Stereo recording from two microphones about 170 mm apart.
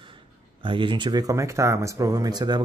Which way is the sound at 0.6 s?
30° right (ahead or behind).